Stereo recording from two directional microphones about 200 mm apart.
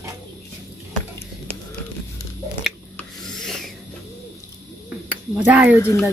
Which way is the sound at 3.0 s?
Centre (ahead or behind).